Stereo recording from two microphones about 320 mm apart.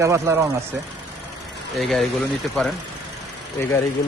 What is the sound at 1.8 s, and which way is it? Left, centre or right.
Speech, centre.